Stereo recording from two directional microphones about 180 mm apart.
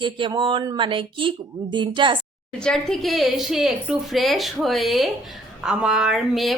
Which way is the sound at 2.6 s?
Centre (ahead or behind).